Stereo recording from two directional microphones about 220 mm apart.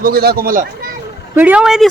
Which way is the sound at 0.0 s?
45° right (ahead or behind).